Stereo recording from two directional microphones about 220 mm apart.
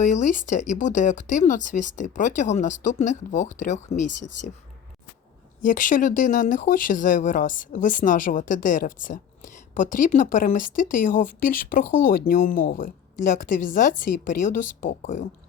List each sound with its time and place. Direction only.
0.0 s a woman's voice: 35° left (ahead or behind)
5.6 s a woman's voice: 35° left (ahead or behind)